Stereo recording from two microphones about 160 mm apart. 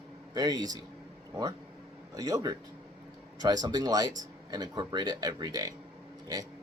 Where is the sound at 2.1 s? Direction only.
20° right (ahead or behind).